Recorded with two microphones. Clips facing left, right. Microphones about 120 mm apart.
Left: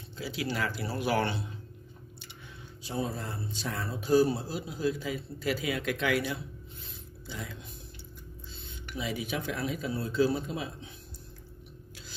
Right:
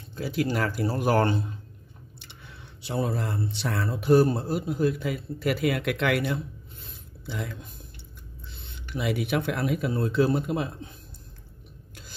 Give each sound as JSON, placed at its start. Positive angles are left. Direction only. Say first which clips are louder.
{"t": 0.1, "sound": "speech", "louder": "right 7 dB", "side_deg": -50}
{"t": 2.1, "sound": "speech", "louder": "right 3 dB", "side_deg": -60}